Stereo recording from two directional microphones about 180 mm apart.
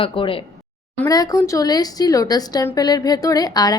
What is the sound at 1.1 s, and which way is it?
A woman's voice, 20° left (ahead or behind).